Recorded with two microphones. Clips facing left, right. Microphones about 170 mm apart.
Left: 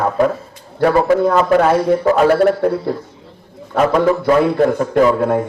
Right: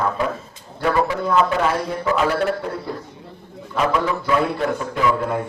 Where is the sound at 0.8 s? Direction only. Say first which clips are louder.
Left 8 dB; 50° left (ahead or behind).